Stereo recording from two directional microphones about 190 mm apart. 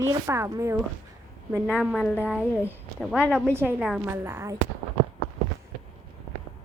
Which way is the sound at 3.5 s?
10° right (ahead or behind).